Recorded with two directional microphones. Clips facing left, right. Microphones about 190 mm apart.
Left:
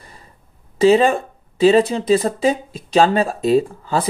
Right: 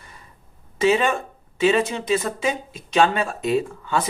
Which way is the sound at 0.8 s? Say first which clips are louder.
Left 6 dB; 35° left (ahead or behind).